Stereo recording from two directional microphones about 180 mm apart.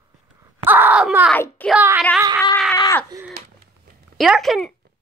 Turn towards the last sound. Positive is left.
turn(degrees=0)  # may be behind; listen again after turning